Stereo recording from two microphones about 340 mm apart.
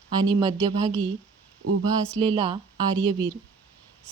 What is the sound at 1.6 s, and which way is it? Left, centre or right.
Speech, right.